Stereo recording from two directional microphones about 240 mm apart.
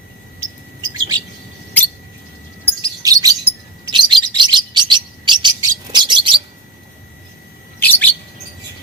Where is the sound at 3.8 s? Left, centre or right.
Centre.